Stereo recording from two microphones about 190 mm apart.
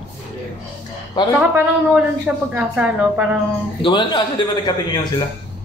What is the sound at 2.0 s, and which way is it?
A woman's voice, 5° right (ahead or behind).